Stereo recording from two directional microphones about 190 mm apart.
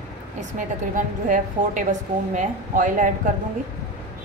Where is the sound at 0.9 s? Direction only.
45° right (ahead or behind).